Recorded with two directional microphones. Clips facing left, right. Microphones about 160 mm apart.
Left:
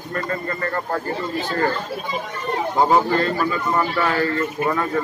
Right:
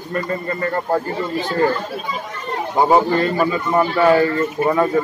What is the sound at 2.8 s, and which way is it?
A man's voice, 20° right (ahead or behind).